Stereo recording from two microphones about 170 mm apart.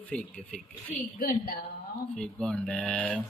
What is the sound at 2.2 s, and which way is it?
Speech, 5° left (ahead or behind).